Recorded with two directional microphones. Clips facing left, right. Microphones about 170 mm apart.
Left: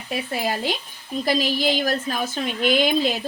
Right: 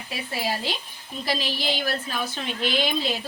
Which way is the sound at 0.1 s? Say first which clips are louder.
Left 4 dB; 50° left (ahead or behind).